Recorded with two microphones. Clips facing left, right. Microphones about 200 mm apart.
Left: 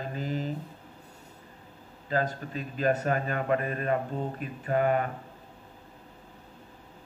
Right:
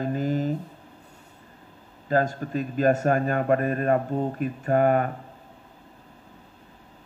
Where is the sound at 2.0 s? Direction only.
45° right (ahead or behind).